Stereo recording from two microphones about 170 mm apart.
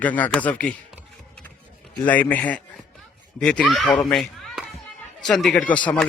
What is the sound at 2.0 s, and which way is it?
Speech, 10° left (ahead or behind).